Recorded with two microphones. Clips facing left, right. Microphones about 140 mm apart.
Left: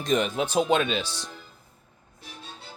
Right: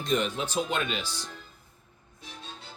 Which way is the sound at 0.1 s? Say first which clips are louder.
Left 4 dB; 50° left (ahead or behind).